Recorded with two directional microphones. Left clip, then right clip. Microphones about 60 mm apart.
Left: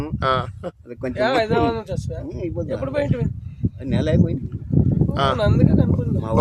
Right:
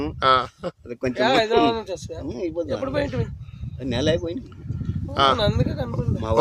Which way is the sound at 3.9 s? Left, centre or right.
Right.